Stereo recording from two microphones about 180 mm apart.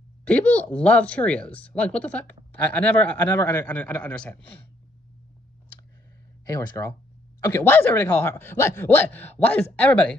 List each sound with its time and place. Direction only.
0.3 s speech: 5° left (ahead or behind)
6.4 s speech: 15° left (ahead or behind)